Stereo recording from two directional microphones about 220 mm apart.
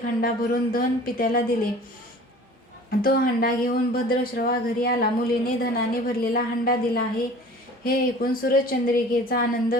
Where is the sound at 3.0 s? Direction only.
40° left (ahead or behind).